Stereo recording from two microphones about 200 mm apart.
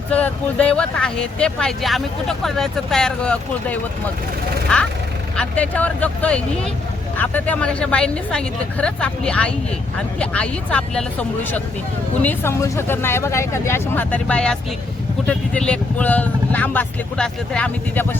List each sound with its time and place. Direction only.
0.1 s speech: 5° left (ahead or behind)